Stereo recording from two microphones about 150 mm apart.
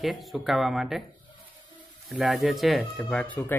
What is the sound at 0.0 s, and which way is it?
Speech, centre (ahead or behind).